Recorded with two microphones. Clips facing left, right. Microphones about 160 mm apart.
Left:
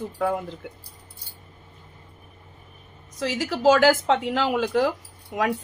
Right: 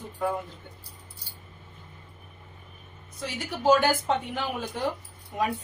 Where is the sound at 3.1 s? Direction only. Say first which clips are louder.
Left 8 dB; 90° left.